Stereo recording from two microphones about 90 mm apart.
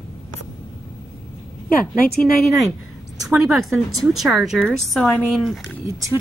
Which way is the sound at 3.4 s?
Centre (ahead or behind).